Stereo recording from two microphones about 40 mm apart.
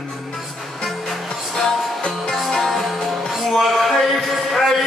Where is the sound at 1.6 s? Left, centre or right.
Centre.